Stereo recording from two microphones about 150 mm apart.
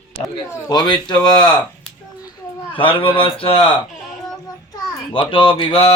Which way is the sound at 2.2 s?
30° left (ahead or behind).